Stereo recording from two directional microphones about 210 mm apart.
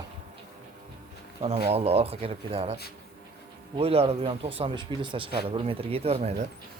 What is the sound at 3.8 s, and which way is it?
Speech, 30° right (ahead or behind).